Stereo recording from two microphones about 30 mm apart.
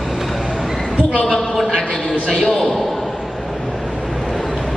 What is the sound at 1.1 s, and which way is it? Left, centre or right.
Speech, left.